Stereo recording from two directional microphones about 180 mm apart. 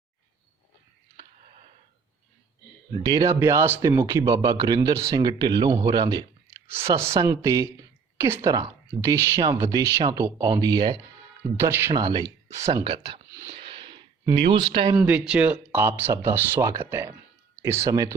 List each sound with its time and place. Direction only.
3.1 s speech: 20° right (ahead or behind)
12.8 s speech: 30° right (ahead or behind)
13.5 s a sound: 30° right (ahead or behind)
14.5 s speech: 25° right (ahead or behind)
14.9 s speech: 5° right (ahead or behind)